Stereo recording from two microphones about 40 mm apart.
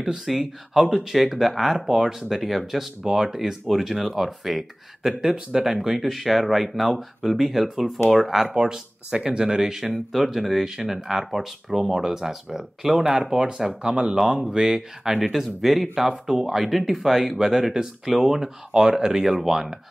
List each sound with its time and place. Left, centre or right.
0.4 s speech: centre
8.5 s speech: centre
10.1 s speech: centre
10.6 s speech: centre
13.2 s speech: right
19.2 s speech: centre